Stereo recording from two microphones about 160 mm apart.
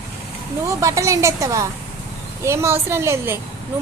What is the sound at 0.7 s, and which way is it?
A woman's voice, 20° right (ahead or behind).